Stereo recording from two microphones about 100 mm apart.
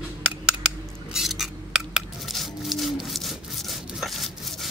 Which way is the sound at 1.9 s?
Centre (ahead or behind).